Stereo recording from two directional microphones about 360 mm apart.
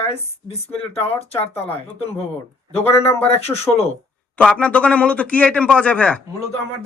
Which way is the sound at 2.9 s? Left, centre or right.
Centre.